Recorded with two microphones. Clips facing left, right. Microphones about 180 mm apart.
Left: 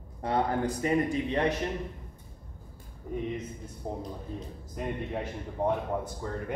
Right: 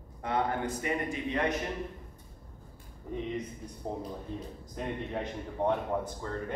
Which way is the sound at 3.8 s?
5° left (ahead or behind).